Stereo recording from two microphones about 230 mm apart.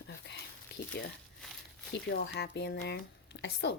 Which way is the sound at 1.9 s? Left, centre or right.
Left.